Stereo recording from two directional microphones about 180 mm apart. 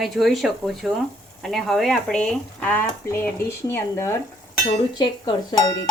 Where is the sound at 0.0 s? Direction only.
Centre (ahead or behind).